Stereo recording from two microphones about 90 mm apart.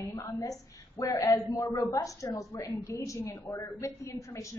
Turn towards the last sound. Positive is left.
turn(degrees=35)  # may be behind; listen again after turning